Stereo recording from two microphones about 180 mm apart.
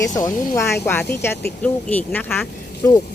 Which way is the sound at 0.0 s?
20° left (ahead or behind).